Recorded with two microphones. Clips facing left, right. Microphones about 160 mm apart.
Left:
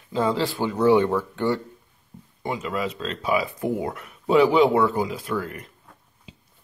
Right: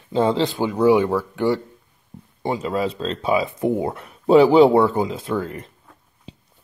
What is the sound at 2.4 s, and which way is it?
Speech, 30° right (ahead or behind).